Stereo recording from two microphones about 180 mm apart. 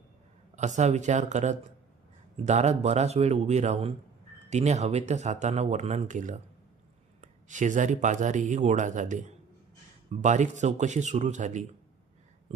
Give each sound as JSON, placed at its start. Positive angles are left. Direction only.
{"t": 0.5, "sound": "speech", "side_deg": -40}